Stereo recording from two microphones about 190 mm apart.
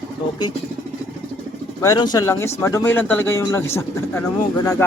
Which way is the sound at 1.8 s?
20° left (ahead or behind).